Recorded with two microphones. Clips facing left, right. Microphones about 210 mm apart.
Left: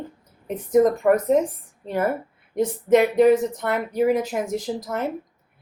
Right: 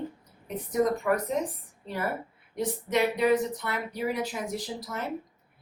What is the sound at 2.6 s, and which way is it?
Speech, 45° left (ahead or behind).